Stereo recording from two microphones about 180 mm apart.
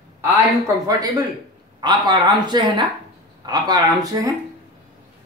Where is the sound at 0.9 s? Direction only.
20° right (ahead or behind).